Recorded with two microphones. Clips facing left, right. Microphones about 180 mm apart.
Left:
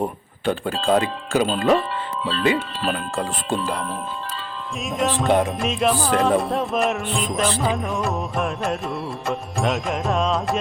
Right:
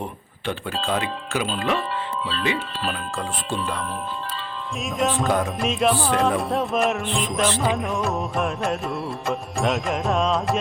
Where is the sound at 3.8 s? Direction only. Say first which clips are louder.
Left 1 dB; centre (ahead or behind).